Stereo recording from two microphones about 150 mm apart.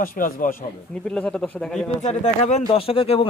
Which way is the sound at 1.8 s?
50° left (ahead or behind).